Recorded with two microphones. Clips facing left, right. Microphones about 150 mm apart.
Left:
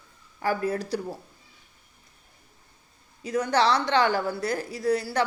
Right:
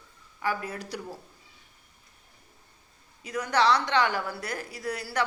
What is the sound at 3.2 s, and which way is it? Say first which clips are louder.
A woman's voice: left 2 dB; 25° left (ahead or behind).